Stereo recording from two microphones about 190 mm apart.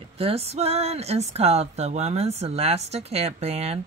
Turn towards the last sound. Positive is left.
turn(degrees=-35)  # may be behind; listen again after turning